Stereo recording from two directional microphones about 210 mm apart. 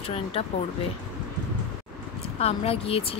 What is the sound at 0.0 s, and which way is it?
Speech, 25° left (ahead or behind).